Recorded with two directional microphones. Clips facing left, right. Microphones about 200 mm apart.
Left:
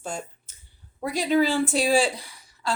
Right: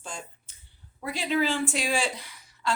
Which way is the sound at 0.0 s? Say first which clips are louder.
Left 7 dB; 45° left (ahead or behind).